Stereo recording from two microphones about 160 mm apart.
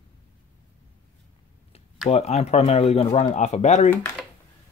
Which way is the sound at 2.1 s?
40° left (ahead or behind).